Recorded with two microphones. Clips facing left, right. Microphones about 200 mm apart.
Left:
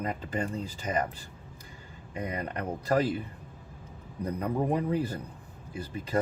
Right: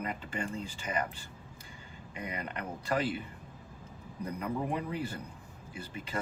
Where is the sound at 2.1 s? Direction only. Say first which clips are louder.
Left 5 dB; 35° left (ahead or behind).